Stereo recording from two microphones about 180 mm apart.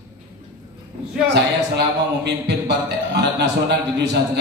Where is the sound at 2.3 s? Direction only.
70° right (ahead or behind).